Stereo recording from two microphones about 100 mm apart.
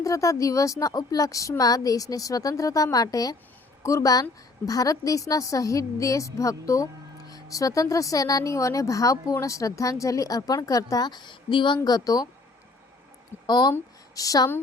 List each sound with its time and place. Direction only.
0.0 s speech: 35° left (ahead or behind); by 11.8 s 50° left (ahead or behind)
11.9 s speech: 40° left (ahead or behind)
13.5 s speech: 45° left (ahead or behind)